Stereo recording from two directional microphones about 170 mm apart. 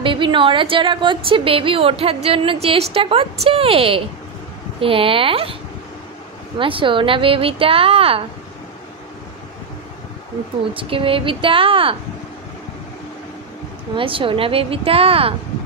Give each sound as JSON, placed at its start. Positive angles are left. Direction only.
{"t": 0.0, "sound": "a woman's voice", "side_deg": -30}
{"t": 6.6, "sound": "a woman's voice", "side_deg": -30}
{"t": 10.7, "sound": "a woman's voice", "side_deg": -30}
{"t": 13.9, "sound": "a woman's voice", "side_deg": -30}